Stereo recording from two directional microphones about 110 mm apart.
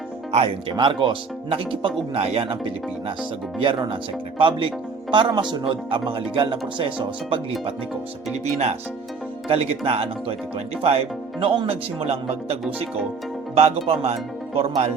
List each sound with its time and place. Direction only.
0.3 s speech: 70° right (ahead or behind)
0.8 s speech: 45° right (ahead or behind)
9.5 s speech: 60° right (ahead or behind)
13.6 s speech: 70° right (ahead or behind)